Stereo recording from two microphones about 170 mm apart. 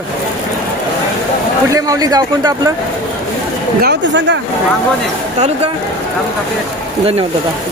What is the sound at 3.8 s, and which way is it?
Speech, 90° right.